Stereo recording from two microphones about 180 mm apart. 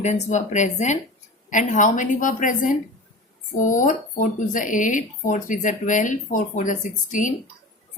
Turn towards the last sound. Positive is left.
turn(degrees=45)  # may be behind; listen again after turning